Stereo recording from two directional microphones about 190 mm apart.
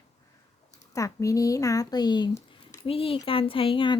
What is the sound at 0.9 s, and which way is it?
Speech, 15° left (ahead or behind).